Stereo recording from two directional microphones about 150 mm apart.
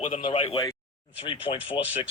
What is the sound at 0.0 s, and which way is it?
Speech, 35° left (ahead or behind).